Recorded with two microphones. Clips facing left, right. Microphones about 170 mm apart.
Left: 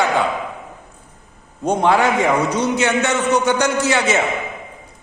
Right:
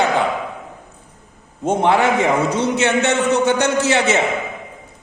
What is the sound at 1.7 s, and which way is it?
A man's voice, 25° right (ahead or behind).